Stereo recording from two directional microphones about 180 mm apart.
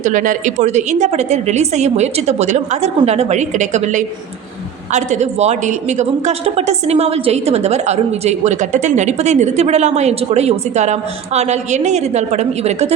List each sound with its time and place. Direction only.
0.0 s a woman's voice: 45° right (ahead or behind)